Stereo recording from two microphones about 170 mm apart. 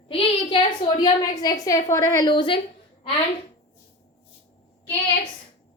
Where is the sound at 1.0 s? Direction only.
25° left (ahead or behind).